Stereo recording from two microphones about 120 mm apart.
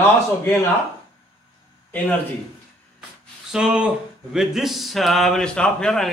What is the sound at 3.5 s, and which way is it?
Speech, 10° right (ahead or behind).